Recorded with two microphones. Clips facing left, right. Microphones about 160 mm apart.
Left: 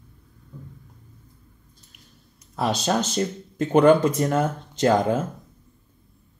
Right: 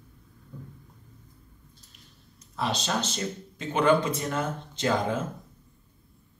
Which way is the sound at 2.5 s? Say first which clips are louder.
Left 5 dB; 45° left (ahead or behind).